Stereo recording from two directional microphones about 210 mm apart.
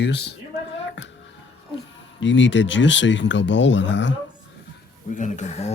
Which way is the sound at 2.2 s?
60° left (ahead or behind).